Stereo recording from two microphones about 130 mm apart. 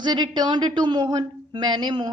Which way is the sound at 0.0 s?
35° right (ahead or behind).